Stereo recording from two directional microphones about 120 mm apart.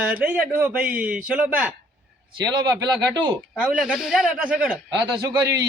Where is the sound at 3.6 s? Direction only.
5° right (ahead or behind).